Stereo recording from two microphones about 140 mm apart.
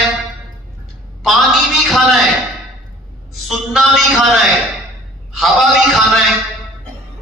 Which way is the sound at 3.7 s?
5° right (ahead or behind).